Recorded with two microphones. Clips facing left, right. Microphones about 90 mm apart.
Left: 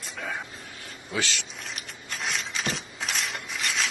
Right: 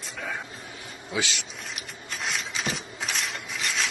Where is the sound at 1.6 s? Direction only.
Centre (ahead or behind).